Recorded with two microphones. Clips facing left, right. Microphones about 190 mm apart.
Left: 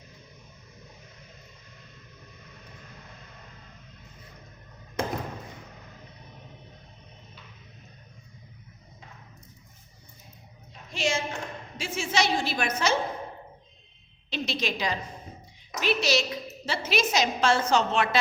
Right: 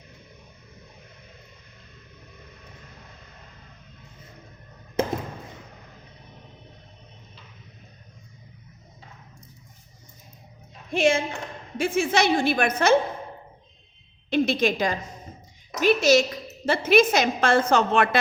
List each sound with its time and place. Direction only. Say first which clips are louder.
10.9 s a woman's voice: right 7 dB; 55° right (ahead or behind)
14.3 s a woman's voice: right 9 dB; 55° right (ahead or behind)